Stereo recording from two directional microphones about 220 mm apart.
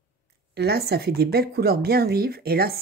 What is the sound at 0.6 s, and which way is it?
A woman's voice, 45° right (ahead or behind).